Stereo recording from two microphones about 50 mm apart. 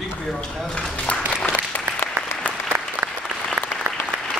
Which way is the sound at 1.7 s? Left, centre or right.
Left.